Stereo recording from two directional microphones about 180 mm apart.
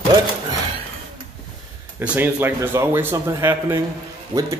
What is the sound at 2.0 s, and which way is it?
A man's voice, 10° right (ahead or behind).